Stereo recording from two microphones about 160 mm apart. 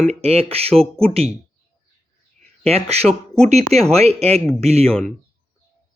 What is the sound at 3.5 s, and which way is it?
Speech, 40° right (ahead or behind).